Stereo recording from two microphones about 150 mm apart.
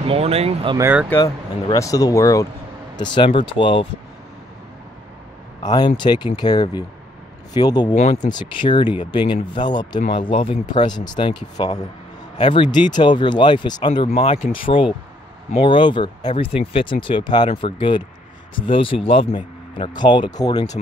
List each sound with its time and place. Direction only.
0.1 s speech: 45° right (ahead or behind)
0.7 s speech: 15° right (ahead or behind)
1.1 s speech: 20° left (ahead or behind)
5.6 s speech: 25° left (ahead or behind)
8.0 s speech: 50° left (ahead or behind)
8.3 s speech: 30° left (ahead or behind)
12.4 s speech: 45° left (ahead or behind)
13.0 s speech: 30° left (ahead or behind)
14.0 s speech: 40° left (ahead or behind); by 20.6 s 25° left (ahead or behind)